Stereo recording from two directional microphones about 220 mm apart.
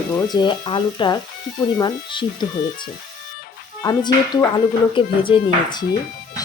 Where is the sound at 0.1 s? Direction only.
15° left (ahead or behind).